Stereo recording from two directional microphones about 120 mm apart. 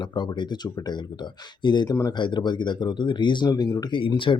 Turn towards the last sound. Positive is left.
turn(degrees=45)  # may be behind; listen again after turning